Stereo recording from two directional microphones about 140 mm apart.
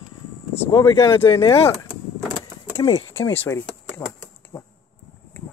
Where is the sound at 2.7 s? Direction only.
30° left (ahead or behind).